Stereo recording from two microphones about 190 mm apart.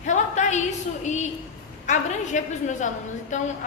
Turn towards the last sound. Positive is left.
turn(degrees=40)  # may be behind; listen again after turning